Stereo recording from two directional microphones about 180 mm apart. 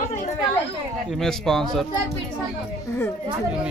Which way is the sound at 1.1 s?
Centre (ahead or behind).